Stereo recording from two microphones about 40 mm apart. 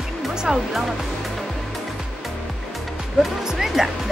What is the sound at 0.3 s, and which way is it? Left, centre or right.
Speech, centre.